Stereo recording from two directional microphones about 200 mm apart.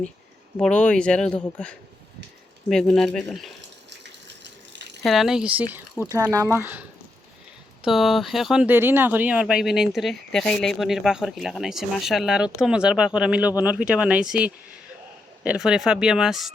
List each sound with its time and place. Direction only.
0.6 s speech: 5° left (ahead or behind)
4.3 s rattle: 60° right (ahead or behind)
5.0 s speech: centre (ahead or behind)
7.9 s speech: centre (ahead or behind)